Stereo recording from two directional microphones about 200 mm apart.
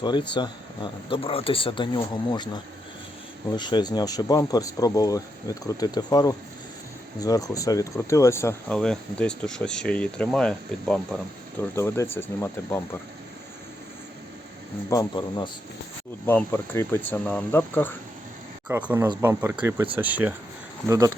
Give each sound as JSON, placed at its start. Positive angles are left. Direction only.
{"t": 0.0, "sound": "speech", "side_deg": 20}
{"t": 14.8, "sound": "speech", "side_deg": 20}
{"t": 18.7, "sound": "speech", "side_deg": -10}